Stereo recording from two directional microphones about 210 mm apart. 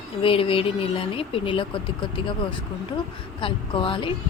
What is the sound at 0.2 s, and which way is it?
Speech, 25° left (ahead or behind).